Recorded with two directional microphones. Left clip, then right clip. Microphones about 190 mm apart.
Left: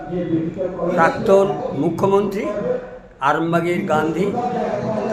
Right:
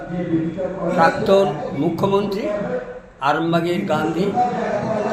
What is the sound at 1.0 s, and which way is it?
A man's voice, centre (ahead or behind).